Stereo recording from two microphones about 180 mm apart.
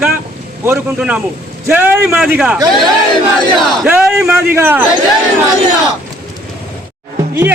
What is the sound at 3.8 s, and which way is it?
Speech, 5° right (ahead or behind).